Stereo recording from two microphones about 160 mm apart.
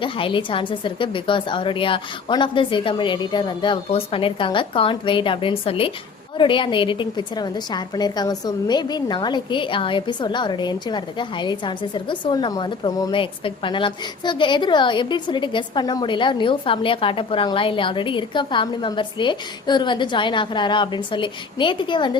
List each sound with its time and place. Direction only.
0.0 s a woman's voice: 30° left (ahead or behind)